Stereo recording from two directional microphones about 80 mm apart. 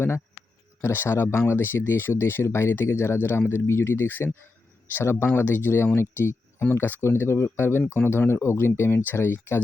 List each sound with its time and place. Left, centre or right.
0.8 s speech: left